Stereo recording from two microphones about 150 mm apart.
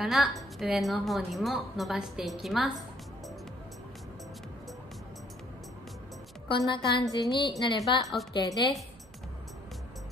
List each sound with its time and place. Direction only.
0.0 s a woman's voice: centre (ahead or behind)
6.5 s a woman's voice: 35° left (ahead or behind)
8.0 s a woman's voice: centre (ahead or behind)